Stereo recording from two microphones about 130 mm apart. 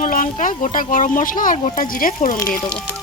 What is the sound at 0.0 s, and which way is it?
Speech, 80° left.